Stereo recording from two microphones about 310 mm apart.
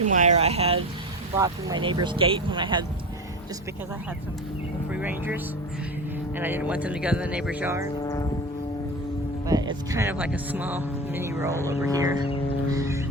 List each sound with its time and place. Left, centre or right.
0.0 s speech: right
4.9 s speech: centre
6.4 s speech: centre
8.0 s vehicle: centre
9.5 s speech: centre
12.7 s music: centre